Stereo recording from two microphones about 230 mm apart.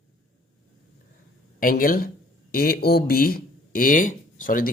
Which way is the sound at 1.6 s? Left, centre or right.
Left.